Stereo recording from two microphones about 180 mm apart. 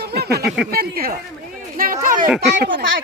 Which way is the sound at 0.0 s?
60° right (ahead or behind).